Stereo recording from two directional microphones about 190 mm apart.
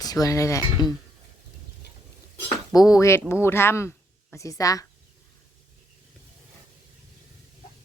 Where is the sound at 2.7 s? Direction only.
20° left (ahead or behind).